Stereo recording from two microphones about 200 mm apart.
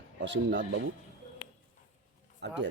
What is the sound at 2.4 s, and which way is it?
Speech, 60° right (ahead or behind).